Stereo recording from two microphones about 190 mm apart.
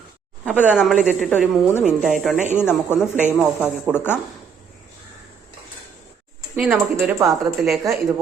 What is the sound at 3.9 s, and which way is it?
Speech, 10° left (ahead or behind).